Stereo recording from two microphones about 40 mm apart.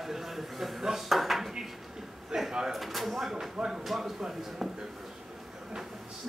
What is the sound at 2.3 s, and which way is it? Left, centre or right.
Drawer open or close, right.